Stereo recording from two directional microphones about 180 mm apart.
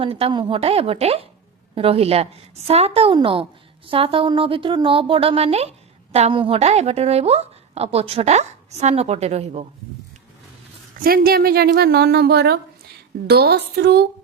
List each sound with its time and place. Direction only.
0.0 s speech: 30° right (ahead or behind)
11.0 s a woman's voice: 55° right (ahead or behind)